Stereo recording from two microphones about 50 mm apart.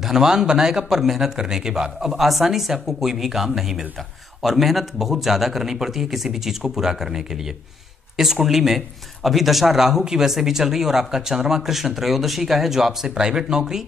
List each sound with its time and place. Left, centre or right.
0.0 s speech: centre